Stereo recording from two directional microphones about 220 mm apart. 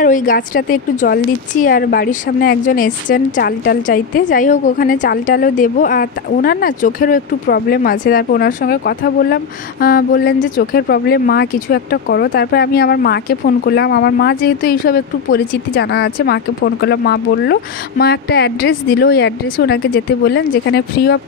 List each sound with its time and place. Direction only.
0.0 s a woman's voice: 40° left (ahead or behind)